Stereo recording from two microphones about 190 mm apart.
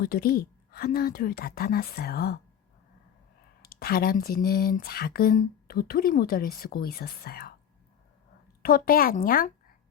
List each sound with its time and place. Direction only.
0.0 s speech: 55° left (ahead or behind)
3.6 s speech: 55° left (ahead or behind)
8.6 s speech: 50° left (ahead or behind)